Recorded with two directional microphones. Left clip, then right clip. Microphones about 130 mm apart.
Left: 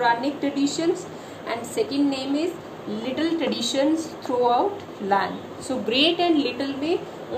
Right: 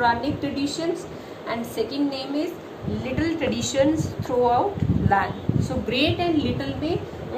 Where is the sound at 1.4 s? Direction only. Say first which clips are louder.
Left 1 dB; 50° left (ahead or behind).